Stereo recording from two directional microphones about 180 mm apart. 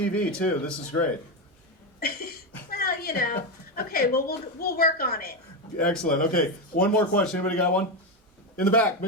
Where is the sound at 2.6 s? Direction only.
55° left (ahead or behind).